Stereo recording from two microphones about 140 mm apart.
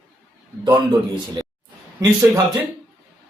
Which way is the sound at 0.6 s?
30° right (ahead or behind).